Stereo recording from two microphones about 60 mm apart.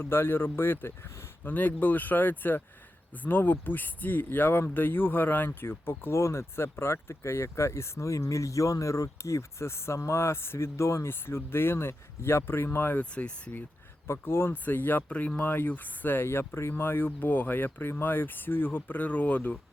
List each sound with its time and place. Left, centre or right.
0.0 s speech: left
13.0 s speech: left
14.1 s speech: left